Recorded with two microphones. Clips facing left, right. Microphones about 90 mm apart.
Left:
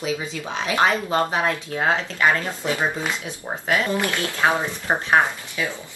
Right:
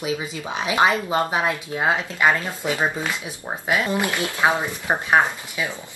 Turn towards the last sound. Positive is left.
turn(degrees=-15)  # may be behind; listen again after turning